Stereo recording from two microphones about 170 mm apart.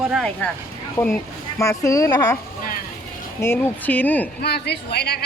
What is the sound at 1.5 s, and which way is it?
Speech, 20° left (ahead or behind).